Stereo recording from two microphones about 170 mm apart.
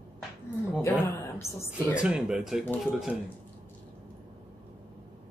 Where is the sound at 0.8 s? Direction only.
10° left (ahead or behind).